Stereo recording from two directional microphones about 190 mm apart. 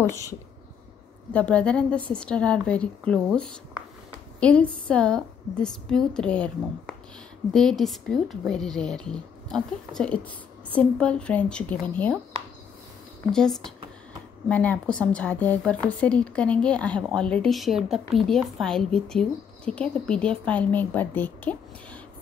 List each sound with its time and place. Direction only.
0.0 s speech: 15° left (ahead or behind)
13.3 s speech: 5° left (ahead or behind)